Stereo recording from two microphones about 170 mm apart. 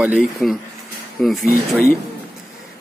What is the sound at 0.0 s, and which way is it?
Speech, 5° right (ahead or behind).